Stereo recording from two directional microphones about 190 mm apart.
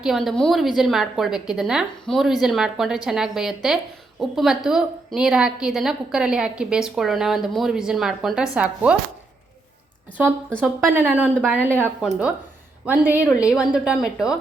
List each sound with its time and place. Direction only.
0.0 s a woman's voice: centre (ahead or behind)
8.5 s chopping: 5° right (ahead or behind)
10.2 s chopping: 10° right (ahead or behind)
11.3 s a woman's voice: centre (ahead or behind)